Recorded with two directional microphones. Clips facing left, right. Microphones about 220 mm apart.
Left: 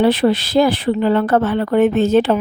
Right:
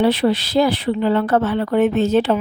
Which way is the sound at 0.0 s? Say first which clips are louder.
Left 2 dB; 50° left (ahead or behind).